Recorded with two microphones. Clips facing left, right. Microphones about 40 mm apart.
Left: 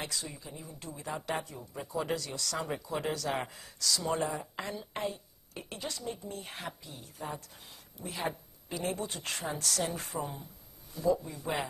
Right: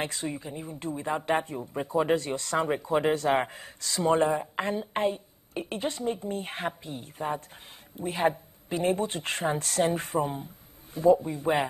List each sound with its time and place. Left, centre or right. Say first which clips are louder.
0.0 s speech: right 7 dB; right